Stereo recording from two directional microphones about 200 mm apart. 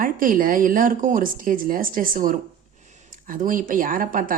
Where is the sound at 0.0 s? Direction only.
45° right (ahead or behind).